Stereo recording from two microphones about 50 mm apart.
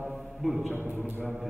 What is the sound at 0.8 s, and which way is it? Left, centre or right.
Speech, right.